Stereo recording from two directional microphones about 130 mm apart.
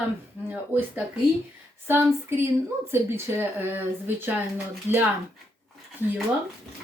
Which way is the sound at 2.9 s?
20° right (ahead or behind).